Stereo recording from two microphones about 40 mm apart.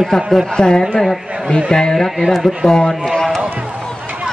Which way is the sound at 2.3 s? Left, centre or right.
Centre.